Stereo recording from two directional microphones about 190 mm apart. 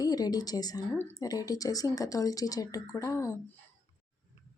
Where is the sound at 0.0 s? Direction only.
20° left (ahead or behind).